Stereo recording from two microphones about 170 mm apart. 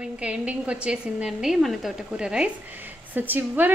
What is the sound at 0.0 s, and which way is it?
A woman's voice, 5° right (ahead or behind).